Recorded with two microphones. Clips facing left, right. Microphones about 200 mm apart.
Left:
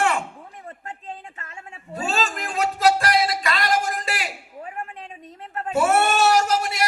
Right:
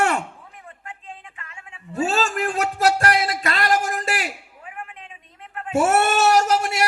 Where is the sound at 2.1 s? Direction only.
45° right (ahead or behind).